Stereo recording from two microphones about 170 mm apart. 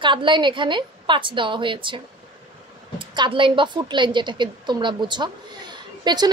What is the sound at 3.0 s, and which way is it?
A woman's voice, 30° right (ahead or behind).